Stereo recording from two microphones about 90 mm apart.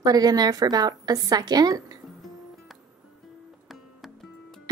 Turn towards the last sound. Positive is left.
turn(degrees=0)  # may be behind; listen again after turning